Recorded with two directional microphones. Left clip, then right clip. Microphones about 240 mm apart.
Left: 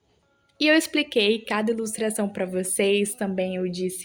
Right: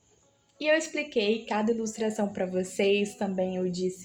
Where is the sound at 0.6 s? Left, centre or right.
Left.